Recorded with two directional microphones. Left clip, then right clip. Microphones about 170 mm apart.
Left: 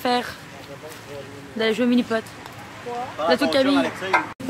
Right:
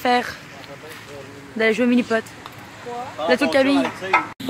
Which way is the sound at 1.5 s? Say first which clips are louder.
Right 3 dB; 35° right (ahead or behind).